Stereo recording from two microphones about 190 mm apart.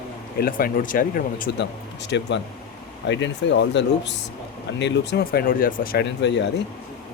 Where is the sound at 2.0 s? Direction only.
70° left (ahead or behind).